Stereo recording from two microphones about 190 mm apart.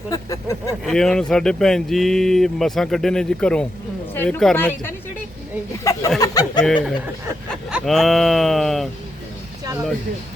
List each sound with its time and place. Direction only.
0.1 s speech: 20° left (ahead or behind)
0.9 s speech: 5° left (ahead or behind)
5.8 s a sound: 20° left (ahead or behind)
6.1 s chuckle: 20° left (ahead or behind)
6.6 s speech: 5° left (ahead or behind)